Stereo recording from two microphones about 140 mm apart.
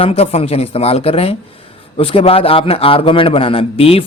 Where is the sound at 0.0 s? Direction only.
45° left (ahead or behind).